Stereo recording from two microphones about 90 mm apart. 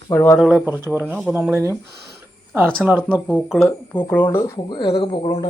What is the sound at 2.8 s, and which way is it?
Speech, 20° right (ahead or behind).